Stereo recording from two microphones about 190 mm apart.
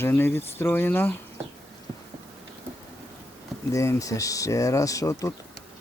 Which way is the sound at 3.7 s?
15° left (ahead or behind).